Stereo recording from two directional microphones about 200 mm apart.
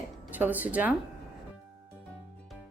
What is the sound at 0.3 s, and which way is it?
Speech, 10° right (ahead or behind).